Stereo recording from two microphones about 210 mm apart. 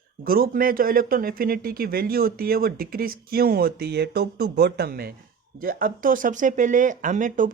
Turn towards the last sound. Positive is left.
turn(degrees=-40)  # may be behind; listen again after turning